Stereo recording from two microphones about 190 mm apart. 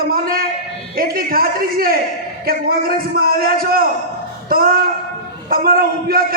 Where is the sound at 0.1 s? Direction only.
50° right (ahead or behind).